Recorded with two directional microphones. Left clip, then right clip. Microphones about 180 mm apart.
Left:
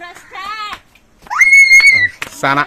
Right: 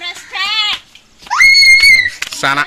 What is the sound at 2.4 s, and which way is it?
Speech, centre (ahead or behind).